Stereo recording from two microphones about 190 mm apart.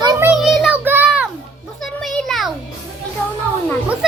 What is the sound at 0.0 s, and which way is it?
Child singing, 15° right (ahead or behind).